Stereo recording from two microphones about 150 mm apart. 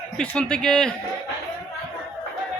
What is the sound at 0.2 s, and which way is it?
Speech, 5° left (ahead or behind).